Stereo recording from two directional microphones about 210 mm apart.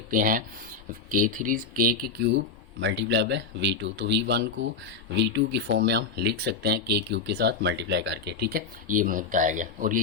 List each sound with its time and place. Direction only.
0.1 s speech: 40° right (ahead or behind)